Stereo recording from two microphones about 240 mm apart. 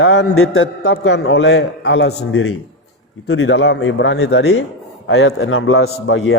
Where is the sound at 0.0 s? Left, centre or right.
Left.